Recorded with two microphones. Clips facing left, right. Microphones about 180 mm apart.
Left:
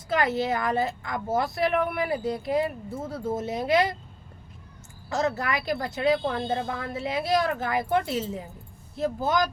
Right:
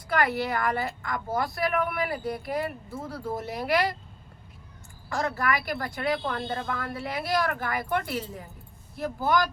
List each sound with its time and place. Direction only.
0.1 s speech: 20° left (ahead or behind)
5.0 s speech: 20° left (ahead or behind)